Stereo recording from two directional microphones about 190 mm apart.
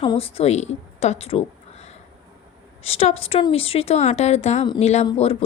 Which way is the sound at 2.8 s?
30° left (ahead or behind).